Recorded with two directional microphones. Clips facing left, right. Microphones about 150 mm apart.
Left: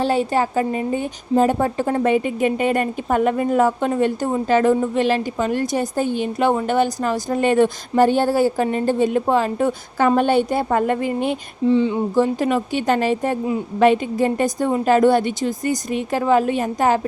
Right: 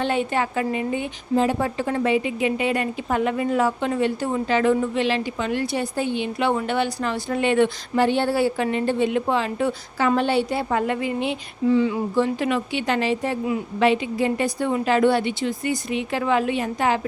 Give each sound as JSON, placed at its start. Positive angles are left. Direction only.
{"t": 0.0, "sound": "a woman's voice", "side_deg": 35}
{"t": 11.7, "sound": "a sound", "side_deg": 25}
{"t": 12.1, "sound": "a woman's voice", "side_deg": 40}